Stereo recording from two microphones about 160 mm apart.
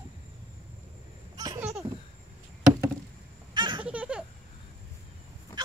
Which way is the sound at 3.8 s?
10° right (ahead or behind).